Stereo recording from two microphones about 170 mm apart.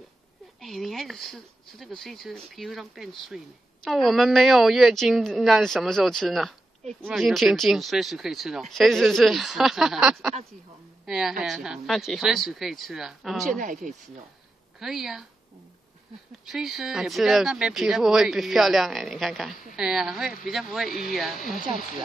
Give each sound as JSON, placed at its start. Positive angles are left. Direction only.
{"t": 0.6, "sound": "speech", "side_deg": 0}
{"t": 6.8, "sound": "speech", "side_deg": -40}
{"t": 7.1, "sound": "speech", "side_deg": 0}
{"t": 13.5, "sound": "speech", "side_deg": -50}
{"t": 14.8, "sound": "speech", "side_deg": 0}
{"t": 16.4, "sound": "speech", "side_deg": 0}